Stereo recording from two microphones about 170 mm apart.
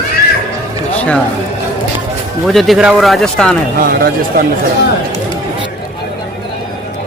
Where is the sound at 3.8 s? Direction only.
55° right (ahead or behind).